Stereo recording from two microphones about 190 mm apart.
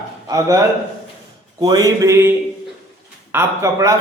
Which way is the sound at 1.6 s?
20° right (ahead or behind).